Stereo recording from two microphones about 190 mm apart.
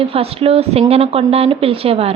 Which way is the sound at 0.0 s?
30° right (ahead or behind).